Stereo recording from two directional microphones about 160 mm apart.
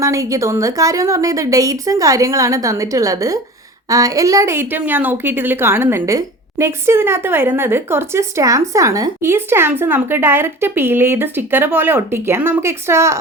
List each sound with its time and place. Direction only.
0.0 s a woman's voice: 20° right (ahead or behind)